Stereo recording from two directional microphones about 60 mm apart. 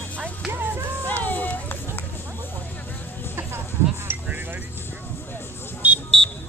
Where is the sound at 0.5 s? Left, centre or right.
Right.